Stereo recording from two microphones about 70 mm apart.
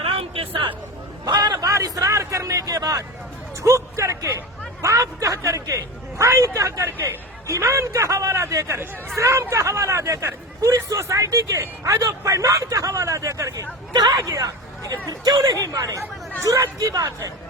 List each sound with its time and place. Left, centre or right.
1.2 s a sound: right
3.6 s speech: right
13.9 s speech: right